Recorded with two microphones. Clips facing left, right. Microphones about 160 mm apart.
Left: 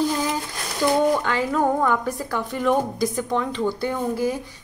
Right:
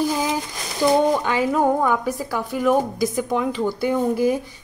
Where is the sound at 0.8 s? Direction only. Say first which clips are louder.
Right 3 dB; 15° right (ahead or behind).